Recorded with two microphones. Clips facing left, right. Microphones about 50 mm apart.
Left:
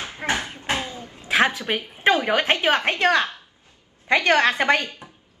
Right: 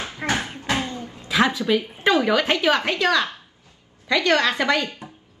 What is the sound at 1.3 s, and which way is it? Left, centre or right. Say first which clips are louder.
A woman's voice: right 1 dB; left.